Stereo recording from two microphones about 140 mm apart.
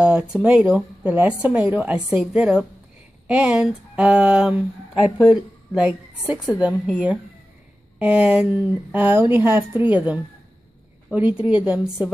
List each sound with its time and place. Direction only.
0.0 s a woman's voice: 5° right (ahead or behind)